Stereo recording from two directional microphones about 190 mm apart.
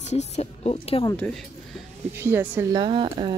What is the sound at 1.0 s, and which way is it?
Speech, 5° left (ahead or behind).